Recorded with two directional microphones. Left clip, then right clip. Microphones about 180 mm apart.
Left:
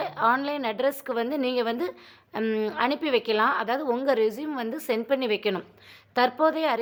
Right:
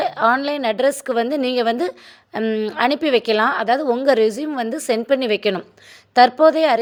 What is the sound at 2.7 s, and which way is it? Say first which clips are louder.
A woman's voice: right 9 dB; 30° right (ahead or behind).